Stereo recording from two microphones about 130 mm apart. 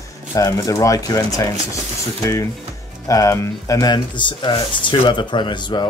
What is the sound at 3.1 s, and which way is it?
Speech, 25° left (ahead or behind).